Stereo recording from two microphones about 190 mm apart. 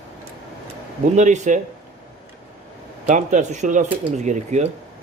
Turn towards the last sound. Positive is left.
turn(degrees=-40)  # may be behind; listen again after turning